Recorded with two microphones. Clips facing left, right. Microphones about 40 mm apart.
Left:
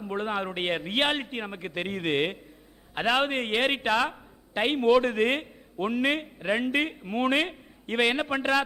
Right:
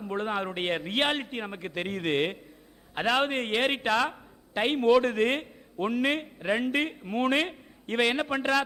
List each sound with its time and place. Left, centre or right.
0.0 s a man's voice: centre